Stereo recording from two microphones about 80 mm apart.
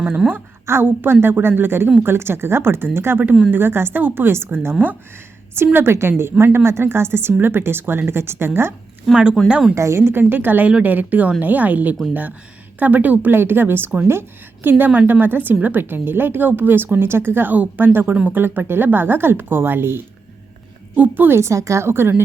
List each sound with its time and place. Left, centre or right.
0.0 s a woman's voice: centre
9.1 s speech: centre
9.5 s speech: centre
9.7 s a woman's voice: right
10.1 s a woman's voice: right